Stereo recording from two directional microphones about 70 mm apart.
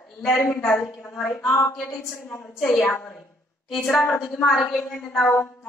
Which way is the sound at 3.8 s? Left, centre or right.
Left.